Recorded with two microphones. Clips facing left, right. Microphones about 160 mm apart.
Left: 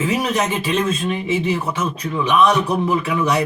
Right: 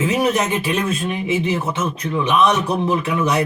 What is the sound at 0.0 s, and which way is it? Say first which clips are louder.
Speech: right 2 dB; 15° right (ahead or behind).